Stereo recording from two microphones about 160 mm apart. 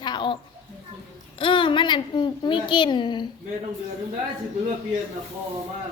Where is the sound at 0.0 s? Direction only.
30° left (ahead or behind).